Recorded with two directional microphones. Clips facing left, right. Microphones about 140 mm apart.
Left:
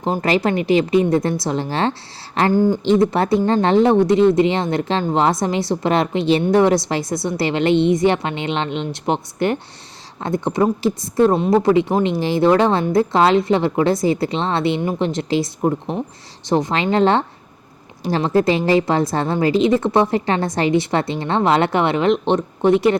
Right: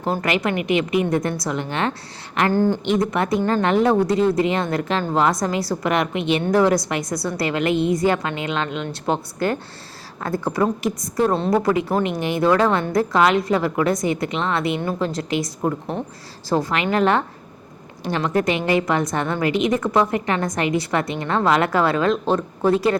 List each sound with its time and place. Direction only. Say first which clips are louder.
0.2 s a woman's voice: left 4 dB; 30° left (ahead or behind)
2.5 s speech: left 3 dB; 15° left (ahead or behind)
3.0 s a woman's voice: left 4 dB; 30° left (ahead or behind)